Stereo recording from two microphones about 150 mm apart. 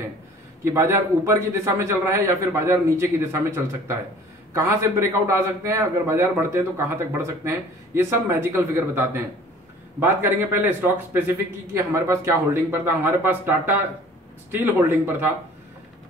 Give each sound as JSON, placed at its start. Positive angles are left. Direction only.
{"t": 0.7, "sound": "a man's voice", "side_deg": -20}